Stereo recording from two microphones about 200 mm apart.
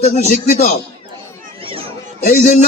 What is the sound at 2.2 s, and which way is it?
Speech, 50° left (ahead or behind).